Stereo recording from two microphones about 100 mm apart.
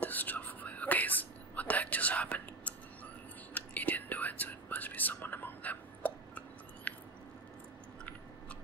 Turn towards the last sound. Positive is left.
turn(degrees=15)  # may be behind; listen again after turning